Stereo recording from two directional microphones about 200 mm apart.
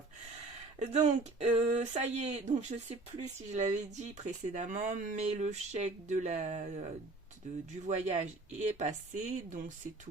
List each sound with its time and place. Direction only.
0.8 s speech: 35° right (ahead or behind)
7.9 s speech: 35° right (ahead or behind)